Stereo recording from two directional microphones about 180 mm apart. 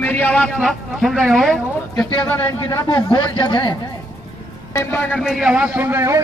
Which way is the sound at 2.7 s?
25° left (ahead or behind).